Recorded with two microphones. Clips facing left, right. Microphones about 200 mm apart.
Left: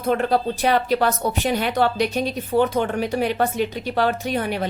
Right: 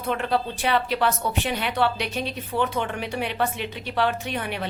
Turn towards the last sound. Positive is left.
turn(degrees=40)  # may be behind; listen again after turning